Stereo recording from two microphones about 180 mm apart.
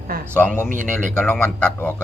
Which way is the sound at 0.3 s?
10° left (ahead or behind).